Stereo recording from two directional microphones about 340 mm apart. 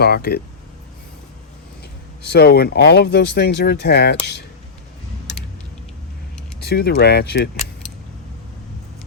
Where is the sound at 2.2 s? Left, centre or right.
Left.